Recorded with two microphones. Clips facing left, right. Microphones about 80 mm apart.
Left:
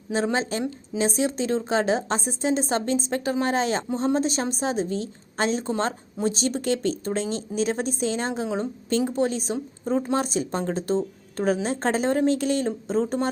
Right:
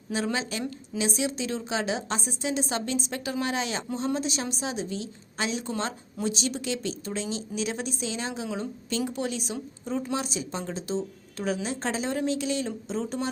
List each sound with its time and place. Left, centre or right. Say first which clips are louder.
0.1 s a woman's voice: left 5 dB; left